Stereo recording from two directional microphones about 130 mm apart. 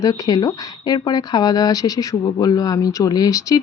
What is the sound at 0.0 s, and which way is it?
Speech, 30° left (ahead or behind).